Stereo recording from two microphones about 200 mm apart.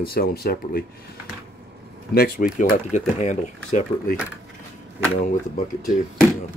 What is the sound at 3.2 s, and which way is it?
Speech, 35° left (ahead or behind).